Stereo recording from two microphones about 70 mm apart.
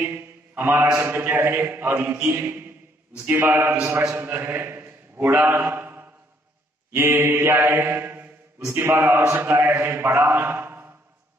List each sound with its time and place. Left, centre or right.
0.0 s mantra: right
0.9 s a man's voice: right
3.7 s mantra: right
4.2 s a man's voice: right
5.7 s a sound: right
6.9 s mantra: right
8.7 s a man's voice: right